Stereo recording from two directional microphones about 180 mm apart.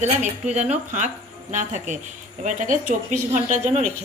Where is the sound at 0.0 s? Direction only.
40° right (ahead or behind).